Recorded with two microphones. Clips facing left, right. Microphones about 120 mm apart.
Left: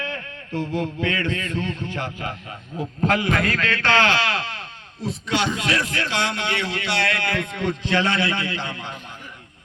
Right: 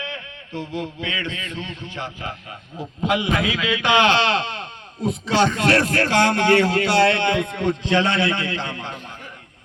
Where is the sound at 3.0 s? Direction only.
15° right (ahead or behind).